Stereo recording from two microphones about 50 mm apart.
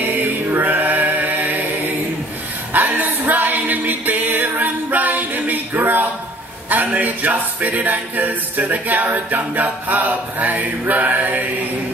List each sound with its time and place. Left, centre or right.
0.2 s chant: right
2.7 s music: right
6.7 s a capella: right